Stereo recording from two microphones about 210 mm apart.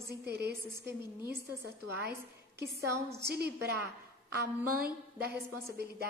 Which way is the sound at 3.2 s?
50° right (ahead or behind).